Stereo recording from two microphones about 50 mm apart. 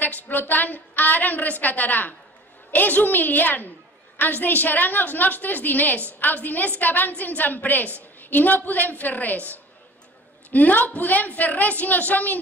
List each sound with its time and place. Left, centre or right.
0.0 s a woman's voice: left